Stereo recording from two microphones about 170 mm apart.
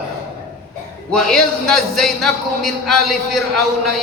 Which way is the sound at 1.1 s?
5° left (ahead or behind).